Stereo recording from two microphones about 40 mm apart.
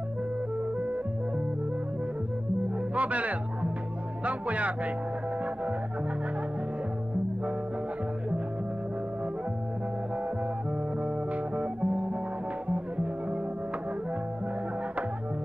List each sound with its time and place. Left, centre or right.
2.9 s music: right
4.2 s speech: right
11.5 s music: right